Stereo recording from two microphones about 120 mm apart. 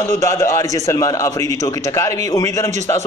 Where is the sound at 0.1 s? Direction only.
25° left (ahead or behind).